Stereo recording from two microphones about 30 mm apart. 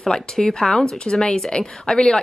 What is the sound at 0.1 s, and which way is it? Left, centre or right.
A woman's voice, left.